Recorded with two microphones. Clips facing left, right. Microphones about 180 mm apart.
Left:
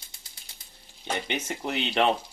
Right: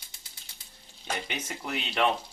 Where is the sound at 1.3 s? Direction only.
25° left (ahead or behind).